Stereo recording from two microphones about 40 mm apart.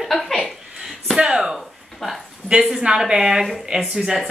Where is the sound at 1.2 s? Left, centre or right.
Centre.